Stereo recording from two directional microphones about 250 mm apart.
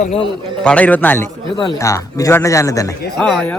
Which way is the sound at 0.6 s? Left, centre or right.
Centre.